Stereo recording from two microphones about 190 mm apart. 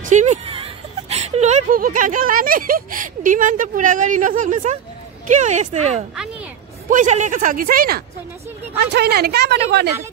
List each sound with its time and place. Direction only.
0.0 s speech: 40° right (ahead or behind)
6.1 s music: 5° right (ahead or behind)
6.9 s a man's voice: 40° right (ahead or behind); by 9.8 s 60° right (ahead or behind)